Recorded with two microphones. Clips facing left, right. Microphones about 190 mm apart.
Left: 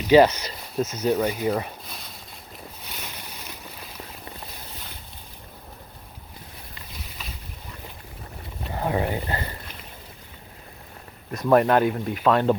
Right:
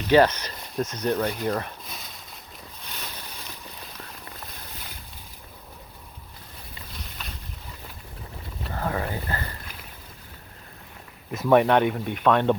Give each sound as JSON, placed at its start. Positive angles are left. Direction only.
{"t": 0.0, "sound": "speech", "side_deg": 10}
{"t": 7.2, "sound": "boat", "side_deg": 0}
{"t": 8.7, "sound": "speech", "side_deg": 20}
{"t": 11.3, "sound": "speech", "side_deg": 0}